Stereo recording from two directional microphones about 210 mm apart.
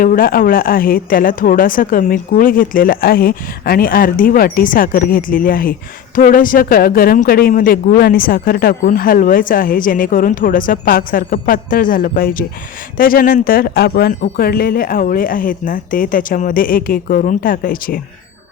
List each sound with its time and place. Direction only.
0.0 s a woman's voice: 40° left (ahead or behind)